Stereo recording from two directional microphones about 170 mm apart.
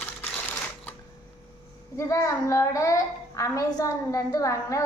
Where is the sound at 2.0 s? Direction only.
20° left (ahead or behind).